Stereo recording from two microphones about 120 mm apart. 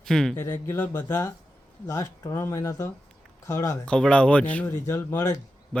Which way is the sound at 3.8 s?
10° left (ahead or behind).